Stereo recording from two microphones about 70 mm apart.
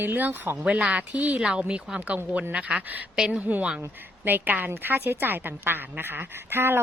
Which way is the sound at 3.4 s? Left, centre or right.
Right.